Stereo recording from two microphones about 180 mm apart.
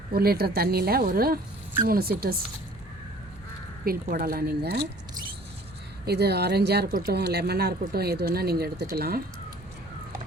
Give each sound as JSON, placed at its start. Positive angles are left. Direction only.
{"t": 0.1, "sound": "speech", "side_deg": -60}
{"t": 3.8, "sound": "speech", "side_deg": -55}
{"t": 6.1, "sound": "speech", "side_deg": -65}